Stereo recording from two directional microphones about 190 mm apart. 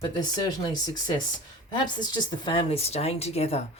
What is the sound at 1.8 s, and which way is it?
Speech, 25° left (ahead or behind).